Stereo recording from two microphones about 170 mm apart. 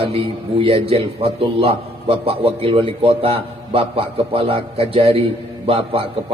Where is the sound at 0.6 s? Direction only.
35° right (ahead or behind).